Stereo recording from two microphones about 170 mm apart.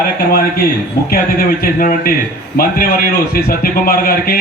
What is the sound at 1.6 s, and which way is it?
A man's voice, 60° left (ahead or behind).